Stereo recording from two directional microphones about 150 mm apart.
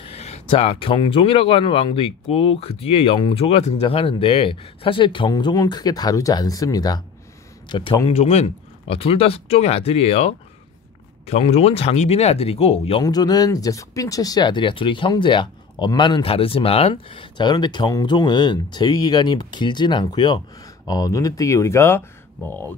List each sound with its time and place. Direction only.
0.0 s speech: 45° left (ahead or behind)
13.0 s speech: 25° left (ahead or behind)